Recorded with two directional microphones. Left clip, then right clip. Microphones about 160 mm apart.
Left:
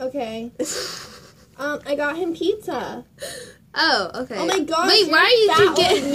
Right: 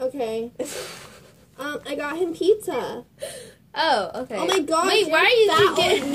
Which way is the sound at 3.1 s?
45° left (ahead or behind).